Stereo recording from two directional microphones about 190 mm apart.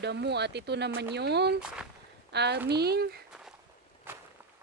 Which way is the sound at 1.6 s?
5° right (ahead or behind).